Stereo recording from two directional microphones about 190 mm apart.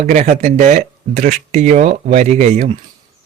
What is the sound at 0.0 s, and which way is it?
Speech, 40° right (ahead or behind).